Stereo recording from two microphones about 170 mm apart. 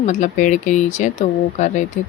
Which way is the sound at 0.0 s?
45° left (ahead or behind).